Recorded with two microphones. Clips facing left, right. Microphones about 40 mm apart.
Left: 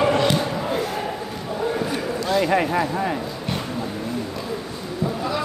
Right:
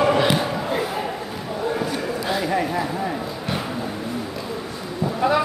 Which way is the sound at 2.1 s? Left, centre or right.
Centre.